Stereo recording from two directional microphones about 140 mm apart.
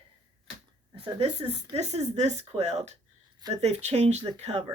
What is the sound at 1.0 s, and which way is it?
Speech, 45° right (ahead or behind).